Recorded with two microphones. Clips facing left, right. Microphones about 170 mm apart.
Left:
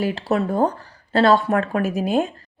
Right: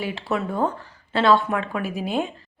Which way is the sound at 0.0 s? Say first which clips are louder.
Left 5 dB; 40° left (ahead or behind).